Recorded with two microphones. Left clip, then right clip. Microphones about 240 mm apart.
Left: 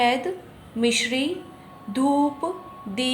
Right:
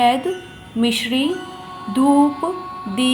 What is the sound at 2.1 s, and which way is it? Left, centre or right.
Music, right.